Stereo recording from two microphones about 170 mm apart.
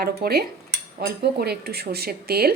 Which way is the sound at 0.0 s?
65° right (ahead or behind).